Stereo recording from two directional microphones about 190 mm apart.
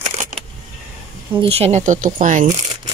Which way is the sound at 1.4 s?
30° right (ahead or behind).